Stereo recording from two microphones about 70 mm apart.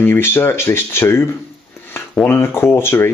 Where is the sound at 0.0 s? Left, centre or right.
Left.